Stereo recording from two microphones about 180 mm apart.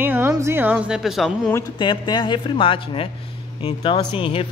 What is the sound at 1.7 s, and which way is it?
Speech, 25° left (ahead or behind).